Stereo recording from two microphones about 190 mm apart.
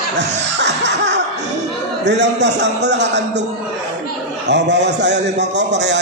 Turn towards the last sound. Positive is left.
turn(degrees=-65)  # may be behind; listen again after turning